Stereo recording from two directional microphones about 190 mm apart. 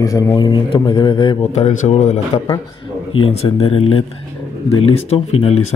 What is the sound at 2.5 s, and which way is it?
A man's voice, 25° left (ahead or behind).